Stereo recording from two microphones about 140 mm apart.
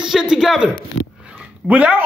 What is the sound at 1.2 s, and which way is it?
Dog, 5° right (ahead or behind).